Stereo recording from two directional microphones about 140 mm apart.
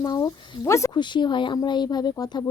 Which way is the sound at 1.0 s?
35° left (ahead or behind).